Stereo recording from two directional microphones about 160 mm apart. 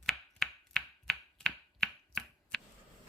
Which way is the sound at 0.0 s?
5° left (ahead or behind).